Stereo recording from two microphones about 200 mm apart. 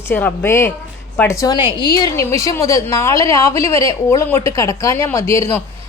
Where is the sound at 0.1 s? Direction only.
10° left (ahead or behind).